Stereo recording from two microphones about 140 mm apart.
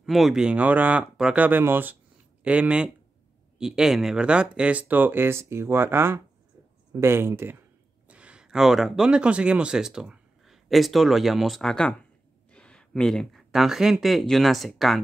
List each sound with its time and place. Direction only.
0.0 s speech: centre (ahead or behind)